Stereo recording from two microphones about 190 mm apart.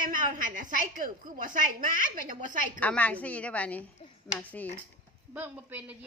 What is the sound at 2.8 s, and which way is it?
Speech, 5° left (ahead or behind).